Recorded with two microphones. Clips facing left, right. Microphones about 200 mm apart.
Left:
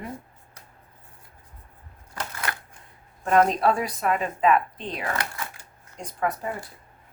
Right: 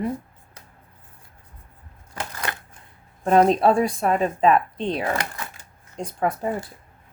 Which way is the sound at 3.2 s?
30° right (ahead or behind).